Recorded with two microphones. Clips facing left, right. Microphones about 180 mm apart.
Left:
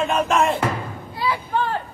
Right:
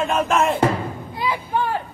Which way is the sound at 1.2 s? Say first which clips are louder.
Even; 15° right (ahead or behind).